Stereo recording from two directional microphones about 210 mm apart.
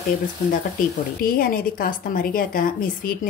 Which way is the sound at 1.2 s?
40° left (ahead or behind).